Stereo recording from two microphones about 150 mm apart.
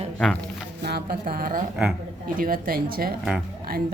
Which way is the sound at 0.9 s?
85° right.